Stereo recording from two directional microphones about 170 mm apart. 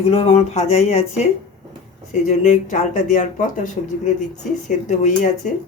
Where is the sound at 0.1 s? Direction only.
35° left (ahead or behind).